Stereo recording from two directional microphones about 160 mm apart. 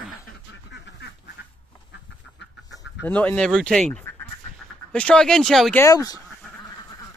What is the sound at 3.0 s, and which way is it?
Speech, 10° left (ahead or behind).